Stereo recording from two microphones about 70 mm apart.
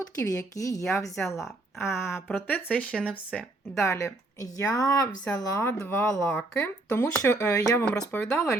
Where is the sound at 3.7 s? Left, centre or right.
Left.